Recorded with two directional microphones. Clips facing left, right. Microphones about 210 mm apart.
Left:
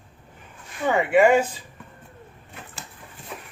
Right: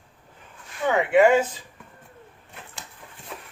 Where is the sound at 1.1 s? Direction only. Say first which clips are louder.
Even; 10° left (ahead or behind).